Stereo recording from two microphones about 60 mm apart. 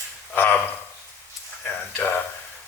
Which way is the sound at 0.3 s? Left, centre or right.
Left.